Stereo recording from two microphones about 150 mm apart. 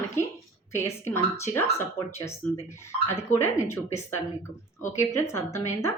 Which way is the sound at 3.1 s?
15° left (ahead or behind).